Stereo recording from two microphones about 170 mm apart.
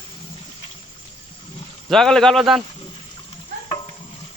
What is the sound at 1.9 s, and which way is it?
Speech, 5° left (ahead or behind).